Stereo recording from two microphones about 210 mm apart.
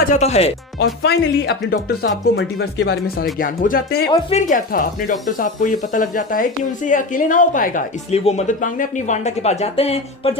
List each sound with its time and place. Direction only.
0.0 s speech: 35° left (ahead or behind)
1.0 s speech: 50° left (ahead or behind)
3.3 s speech: 40° left (ahead or behind)
4.1 s speech: 30° left (ahead or behind)